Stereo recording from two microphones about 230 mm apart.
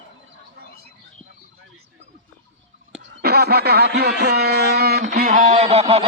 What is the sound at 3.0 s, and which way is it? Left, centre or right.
Speech, right.